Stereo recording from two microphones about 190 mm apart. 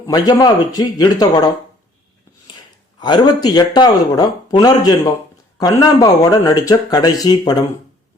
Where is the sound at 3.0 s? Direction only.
20° left (ahead or behind).